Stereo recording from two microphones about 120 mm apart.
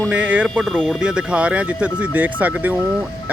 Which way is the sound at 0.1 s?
10° right (ahead or behind).